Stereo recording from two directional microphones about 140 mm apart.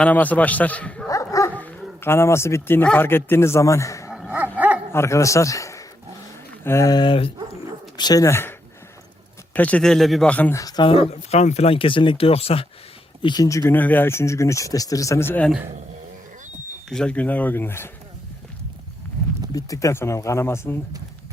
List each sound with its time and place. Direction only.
0.0 s a man's voice: 10° left (ahead or behind)
1.0 s dog: 25° left (ahead or behind)
1.5 s speech: 15° left (ahead or behind)
4.1 s dog: 10° right (ahead or behind)
4.9 s a man's voice: 20° left (ahead or behind)
10.5 s speech: 25° left (ahead or behind)
10.8 s speech: 45° left (ahead or behind)
13.2 s speech: 25° left (ahead or behind)
16.9 s a man's voice: 5° left (ahead or behind)
19.5 s speech: 25° left (ahead or behind)